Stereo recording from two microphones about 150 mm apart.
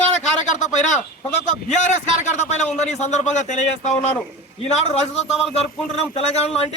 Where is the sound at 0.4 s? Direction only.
55° left (ahead or behind).